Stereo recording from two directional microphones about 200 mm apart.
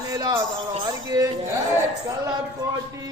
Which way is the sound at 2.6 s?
15° right (ahead or behind).